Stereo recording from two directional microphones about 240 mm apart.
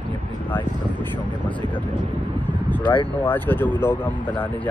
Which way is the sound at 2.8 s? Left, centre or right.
Left.